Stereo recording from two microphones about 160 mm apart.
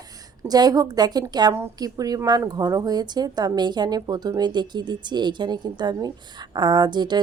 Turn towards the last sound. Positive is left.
turn(degrees=-25)  # may be behind; listen again after turning